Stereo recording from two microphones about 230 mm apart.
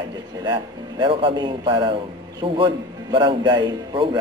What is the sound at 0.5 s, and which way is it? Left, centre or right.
A man's voice, right.